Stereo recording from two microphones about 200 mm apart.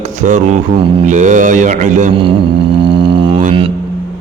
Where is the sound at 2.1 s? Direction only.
25° right (ahead or behind).